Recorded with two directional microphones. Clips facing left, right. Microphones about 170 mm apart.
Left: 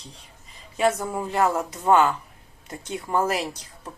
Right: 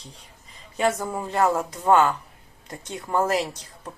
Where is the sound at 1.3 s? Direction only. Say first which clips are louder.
Right 1 dB; 20° left (ahead or behind).